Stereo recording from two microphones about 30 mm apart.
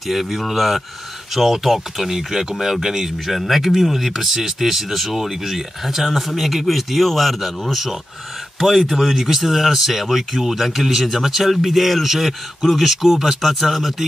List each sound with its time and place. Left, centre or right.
0.0 s speech: centre
3.3 s speech: centre
8.9 s speech: centre